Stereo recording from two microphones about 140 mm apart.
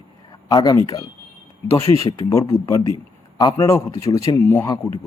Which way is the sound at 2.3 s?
25° left (ahead or behind).